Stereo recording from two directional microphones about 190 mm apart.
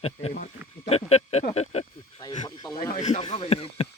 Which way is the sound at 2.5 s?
20° left (ahead or behind).